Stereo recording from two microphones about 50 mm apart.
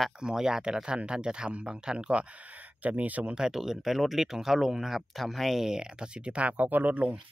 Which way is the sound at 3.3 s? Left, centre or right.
Centre.